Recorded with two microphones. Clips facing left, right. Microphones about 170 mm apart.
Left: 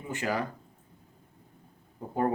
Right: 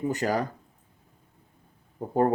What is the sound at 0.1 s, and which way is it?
Speech, 40° right (ahead or behind).